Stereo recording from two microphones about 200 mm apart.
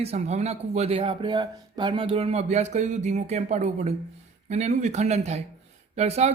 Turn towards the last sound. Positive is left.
turn(degrees=-35)  # may be behind; listen again after turning